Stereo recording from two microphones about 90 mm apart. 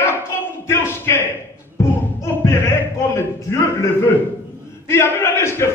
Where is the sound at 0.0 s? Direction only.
25° left (ahead or behind).